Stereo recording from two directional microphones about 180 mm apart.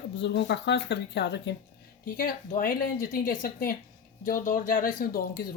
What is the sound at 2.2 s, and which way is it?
Speech, 50° left (ahead or behind).